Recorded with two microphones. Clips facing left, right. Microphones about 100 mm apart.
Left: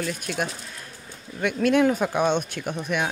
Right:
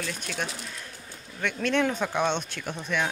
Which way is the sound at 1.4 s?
10° left (ahead or behind).